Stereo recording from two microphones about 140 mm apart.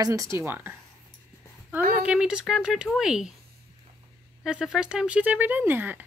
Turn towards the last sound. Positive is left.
turn(degrees=-15)  # may be behind; listen again after turning